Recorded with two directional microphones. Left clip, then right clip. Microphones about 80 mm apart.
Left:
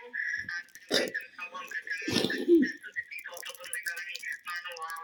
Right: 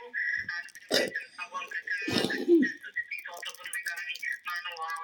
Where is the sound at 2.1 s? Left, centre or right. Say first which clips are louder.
Left 1 dB; centre.